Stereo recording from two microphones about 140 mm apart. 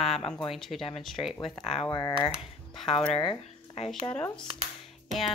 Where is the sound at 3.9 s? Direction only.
10° left (ahead or behind).